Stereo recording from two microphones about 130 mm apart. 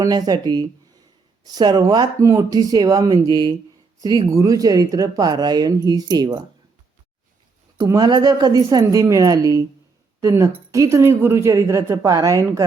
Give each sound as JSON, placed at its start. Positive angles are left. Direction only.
{"t": 0.0, "sound": "speech", "side_deg": -30}
{"t": 7.9, "sound": "speech", "side_deg": -30}